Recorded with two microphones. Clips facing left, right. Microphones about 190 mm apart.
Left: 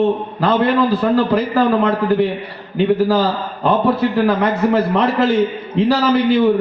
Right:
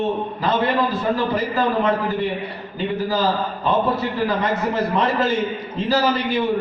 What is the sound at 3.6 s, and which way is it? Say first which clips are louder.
A man's voice: left 7 dB; 65° left (ahead or behind).